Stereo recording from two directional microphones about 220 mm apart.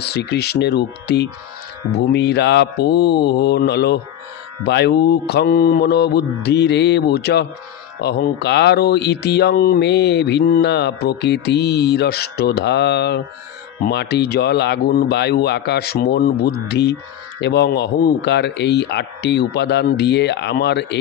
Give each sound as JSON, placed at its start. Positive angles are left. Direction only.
{"t": 0.0, "sound": "speech", "side_deg": 50}